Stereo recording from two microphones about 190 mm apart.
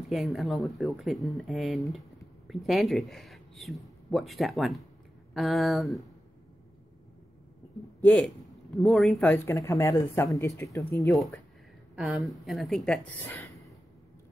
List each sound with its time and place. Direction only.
0.1 s speech: centre (ahead or behind)
8.0 s speech: 5° left (ahead or behind)
9.2 s speech: 15° left (ahead or behind)
11.1 s a woman's voice: centre (ahead or behind)